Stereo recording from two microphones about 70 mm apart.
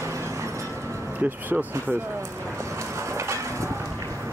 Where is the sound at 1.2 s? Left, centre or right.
Right.